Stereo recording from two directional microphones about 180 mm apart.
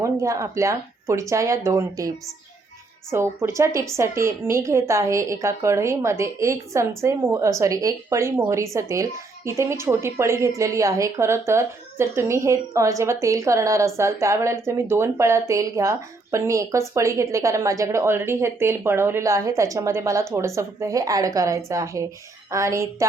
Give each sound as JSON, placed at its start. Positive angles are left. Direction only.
{"t": 0.0, "sound": "a woman's voice", "side_deg": -15}